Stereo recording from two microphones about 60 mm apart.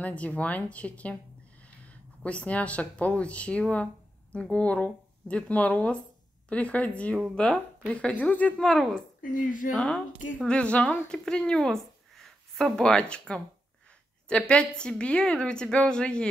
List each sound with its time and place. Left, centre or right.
0.0 s speech: left
7.3 s a woman's voice: centre
7.9 s speech: left
8.5 s a woman's voice: centre
11.0 s a woman's voice: centre